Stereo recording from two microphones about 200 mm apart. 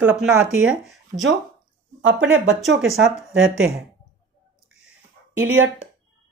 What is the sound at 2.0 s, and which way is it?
Speech, 65° right (ahead or behind).